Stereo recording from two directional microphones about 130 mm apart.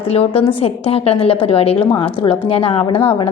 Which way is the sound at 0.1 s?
50° left (ahead or behind).